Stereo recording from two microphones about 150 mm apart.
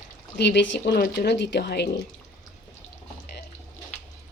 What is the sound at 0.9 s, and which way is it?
Speech, 90° left.